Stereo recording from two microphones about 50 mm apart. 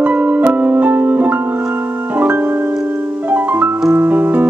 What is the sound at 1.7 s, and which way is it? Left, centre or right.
Keyboard, right.